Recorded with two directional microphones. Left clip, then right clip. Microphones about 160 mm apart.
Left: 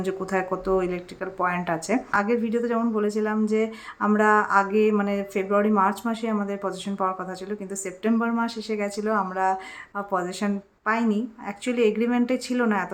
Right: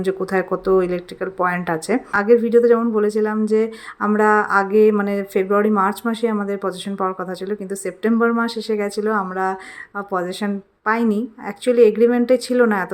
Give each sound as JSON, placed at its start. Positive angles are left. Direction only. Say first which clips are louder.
{"t": 0.0, "sound": "speech", "louder": "right 6 dB", "side_deg": -25}